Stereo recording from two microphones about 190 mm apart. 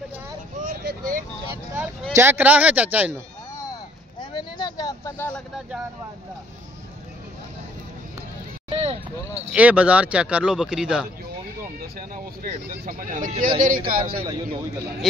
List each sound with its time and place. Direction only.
0.6 s vehicle: 45° right (ahead or behind)
2.1 s speech: 10° right (ahead or behind)
4.2 s a sound: 25° left (ahead or behind)
8.6 s vehicle: 35° right (ahead or behind)
9.5 s speech: 5° right (ahead or behind)
12.4 s a man's voice: 40° right (ahead or behind)